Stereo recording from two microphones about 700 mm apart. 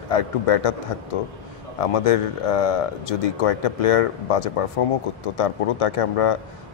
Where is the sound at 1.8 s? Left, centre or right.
Left.